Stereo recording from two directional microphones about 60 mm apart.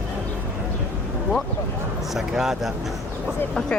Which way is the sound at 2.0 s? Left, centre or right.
Centre.